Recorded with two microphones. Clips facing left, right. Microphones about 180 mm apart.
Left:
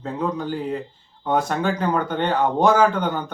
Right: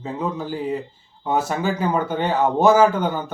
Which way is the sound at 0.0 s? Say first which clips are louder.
Left 1 dB; 5° right (ahead or behind).